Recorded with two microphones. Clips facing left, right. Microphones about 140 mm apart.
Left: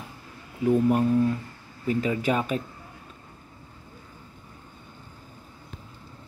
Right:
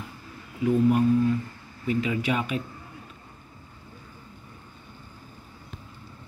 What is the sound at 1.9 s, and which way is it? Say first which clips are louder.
Speech: left 1 dB; 40° left (ahead or behind).